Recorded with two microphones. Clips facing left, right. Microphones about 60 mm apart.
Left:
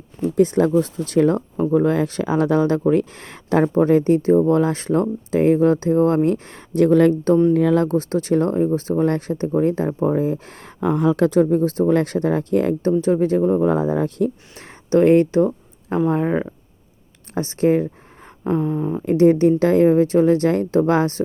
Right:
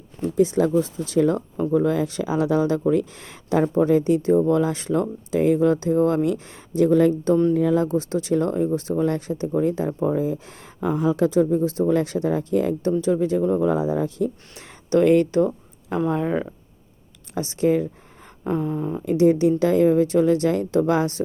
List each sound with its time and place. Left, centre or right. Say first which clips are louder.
0.3 s speech: left 3 dB; left
1.7 s speech: left 3 dB; left
7.9 s speech: left 3 dB; left
13.0 s speech: left 3 dB; left
14.5 s speech: left 2 dB; left
17.3 s speech: left 3 dB; left
18.5 s speech: left 4 dB; left
19.0 s speech: left 3 dB; left